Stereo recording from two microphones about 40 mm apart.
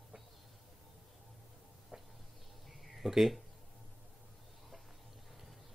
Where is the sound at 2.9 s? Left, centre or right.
Centre.